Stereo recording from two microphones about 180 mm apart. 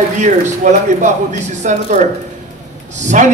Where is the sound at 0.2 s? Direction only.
40° right (ahead or behind).